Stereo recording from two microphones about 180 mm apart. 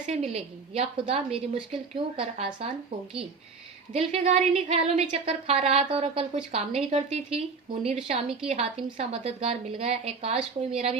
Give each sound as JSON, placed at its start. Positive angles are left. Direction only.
{"t": 0.0, "sound": "a woman's voice", "side_deg": -35}
{"t": 3.9, "sound": "a woman's voice", "side_deg": -35}